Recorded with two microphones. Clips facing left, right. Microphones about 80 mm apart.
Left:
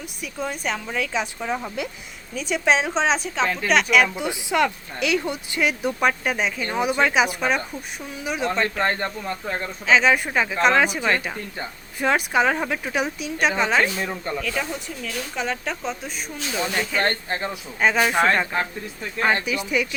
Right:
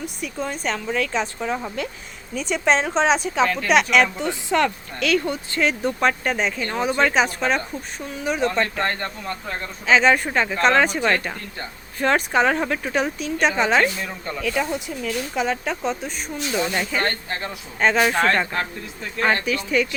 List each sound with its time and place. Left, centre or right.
0.0 s speech: centre
8.8 s speech: centre
9.8 s speech: centre
13.8 s speech: centre
14.4 s speech: centre
17.0 s speech: left
17.7 s speech: centre